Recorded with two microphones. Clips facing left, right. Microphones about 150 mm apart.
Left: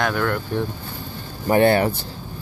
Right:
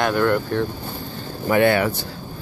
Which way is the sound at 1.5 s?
35° left (ahead or behind).